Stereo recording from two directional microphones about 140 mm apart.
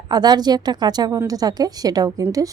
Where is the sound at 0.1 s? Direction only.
30° right (ahead or behind).